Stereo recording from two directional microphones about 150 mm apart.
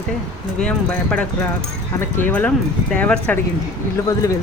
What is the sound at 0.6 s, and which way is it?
Speech, 10° left (ahead or behind).